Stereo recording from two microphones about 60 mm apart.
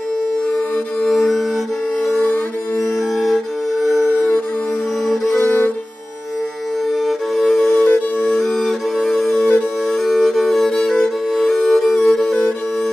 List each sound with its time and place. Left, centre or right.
1.0 s music: centre
3.8 s music: centre
7.1 s music: centre
7.7 s music: left
8.2 s music: centre